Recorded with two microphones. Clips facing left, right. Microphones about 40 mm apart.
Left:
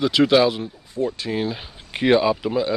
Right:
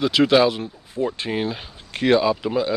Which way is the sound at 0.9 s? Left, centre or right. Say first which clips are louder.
Even; right.